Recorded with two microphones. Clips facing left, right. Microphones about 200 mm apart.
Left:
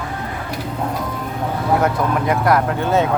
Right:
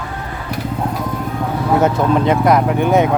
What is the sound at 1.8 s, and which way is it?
Speech, 25° right (ahead or behind).